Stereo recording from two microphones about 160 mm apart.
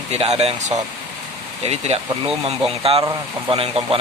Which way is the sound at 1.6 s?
40° right (ahead or behind).